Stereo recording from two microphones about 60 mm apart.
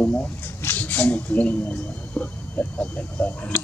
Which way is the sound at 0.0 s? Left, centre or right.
Left.